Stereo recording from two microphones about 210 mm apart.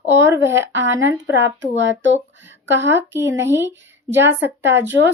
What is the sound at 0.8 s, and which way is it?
Speech, 60° right (ahead or behind).